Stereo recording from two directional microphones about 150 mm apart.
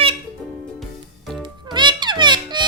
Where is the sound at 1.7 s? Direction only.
30° right (ahead or behind).